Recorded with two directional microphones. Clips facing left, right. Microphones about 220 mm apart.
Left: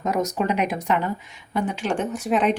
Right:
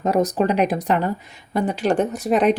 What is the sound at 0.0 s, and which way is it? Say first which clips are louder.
Speech: right 5 dB; 35° right (ahead or behind).